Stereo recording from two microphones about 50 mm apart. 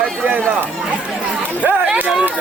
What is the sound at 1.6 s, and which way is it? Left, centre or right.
Speech, right.